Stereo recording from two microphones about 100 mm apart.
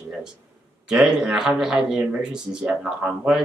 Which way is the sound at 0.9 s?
5° right (ahead or behind).